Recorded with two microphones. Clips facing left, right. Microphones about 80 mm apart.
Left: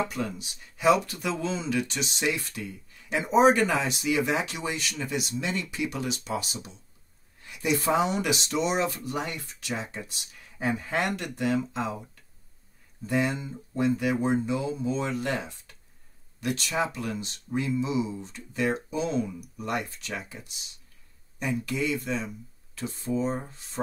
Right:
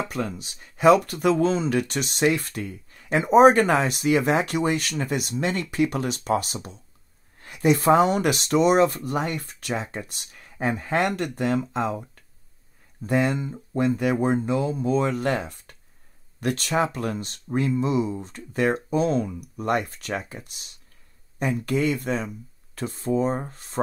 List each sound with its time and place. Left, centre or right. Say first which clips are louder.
0.1 s speech: right 3 dB; right
13.0 s speech: right 4 dB; right